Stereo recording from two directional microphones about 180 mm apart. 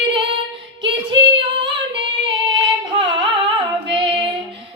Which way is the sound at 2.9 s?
25° right (ahead or behind).